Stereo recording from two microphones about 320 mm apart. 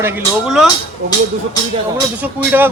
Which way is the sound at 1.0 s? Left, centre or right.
Right.